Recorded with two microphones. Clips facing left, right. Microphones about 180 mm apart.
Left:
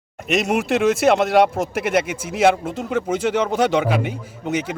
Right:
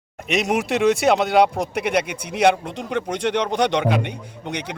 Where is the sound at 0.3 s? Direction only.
Centre (ahead or behind).